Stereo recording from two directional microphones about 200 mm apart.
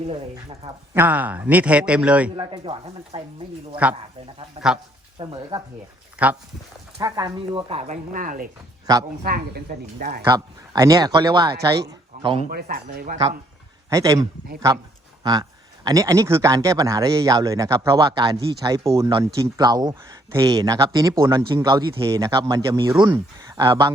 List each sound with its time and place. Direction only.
0.9 s speech: 10° right (ahead or behind)
2.3 s speech: 25° right (ahead or behind)
4.6 s speech: 30° right (ahead or behind)
6.2 s speech: 5° right (ahead or behind)
7.0 s speech: 20° right (ahead or behind)
8.1 s a woman's voice: 45° right (ahead or behind)
8.9 s speech: 20° right (ahead or behind)
9.2 s a woman's voice: 50° right (ahead or behind)
10.2 s speech: 15° right (ahead or behind)
12.5 s a woman's voice: 45° right (ahead or behind)
13.9 s speech: 15° right (ahead or behind)
15.2 s speech: 20° right (ahead or behind)